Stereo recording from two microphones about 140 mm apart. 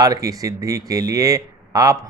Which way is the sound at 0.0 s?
25° right (ahead or behind).